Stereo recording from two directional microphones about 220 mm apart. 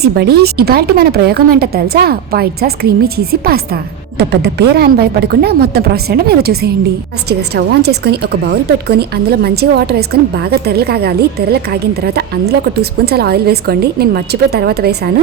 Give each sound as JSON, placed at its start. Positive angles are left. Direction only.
{"t": 0.0, "sound": "speech", "side_deg": -45}